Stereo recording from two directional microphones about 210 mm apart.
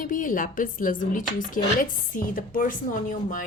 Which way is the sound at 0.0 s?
40° left (ahead or behind).